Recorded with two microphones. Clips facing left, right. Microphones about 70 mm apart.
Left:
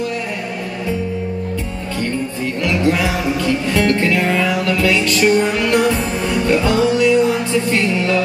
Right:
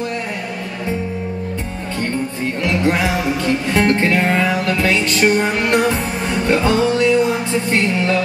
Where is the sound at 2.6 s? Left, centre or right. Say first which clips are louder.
Left 1 dB; right.